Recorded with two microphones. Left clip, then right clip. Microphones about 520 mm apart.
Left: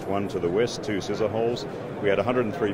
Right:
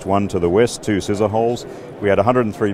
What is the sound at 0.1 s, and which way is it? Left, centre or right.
Speech, right.